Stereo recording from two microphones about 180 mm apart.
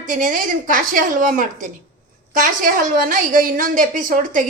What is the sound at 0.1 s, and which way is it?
A woman's voice, 45° right (ahead or behind).